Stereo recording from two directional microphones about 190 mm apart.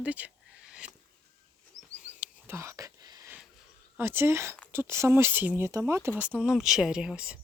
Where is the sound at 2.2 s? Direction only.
15° right (ahead or behind).